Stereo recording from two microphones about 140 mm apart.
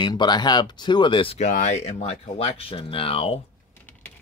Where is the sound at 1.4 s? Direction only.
60° left (ahead or behind); by 3.4 s 40° left (ahead or behind).